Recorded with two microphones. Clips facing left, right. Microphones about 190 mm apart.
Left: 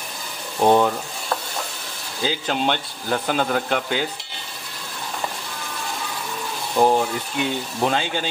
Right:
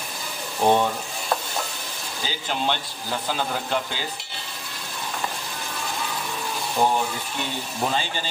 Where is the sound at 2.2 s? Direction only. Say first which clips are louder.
Left 5 dB; 70° left (ahead or behind).